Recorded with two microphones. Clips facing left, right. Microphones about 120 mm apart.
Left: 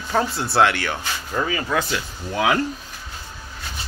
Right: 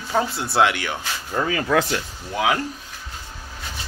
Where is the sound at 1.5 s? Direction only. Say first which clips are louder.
Right 6 dB; 55° right (ahead or behind).